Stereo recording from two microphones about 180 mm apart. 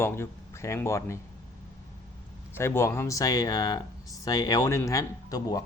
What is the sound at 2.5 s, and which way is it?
Speech, 15° left (ahead or behind).